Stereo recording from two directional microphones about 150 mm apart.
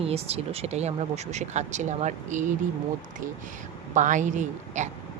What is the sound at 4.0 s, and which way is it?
Speech, 55° right (ahead or behind).